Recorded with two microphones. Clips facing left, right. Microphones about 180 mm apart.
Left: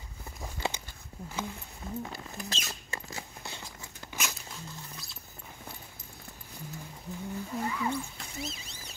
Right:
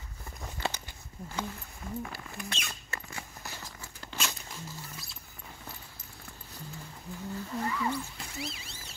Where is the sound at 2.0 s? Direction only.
25° left (ahead or behind).